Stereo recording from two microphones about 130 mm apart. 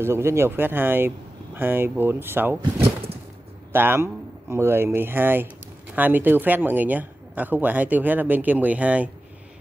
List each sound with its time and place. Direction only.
0.0 s speech: 20° right (ahead or behind)
3.7 s speech: 15° right (ahead or behind)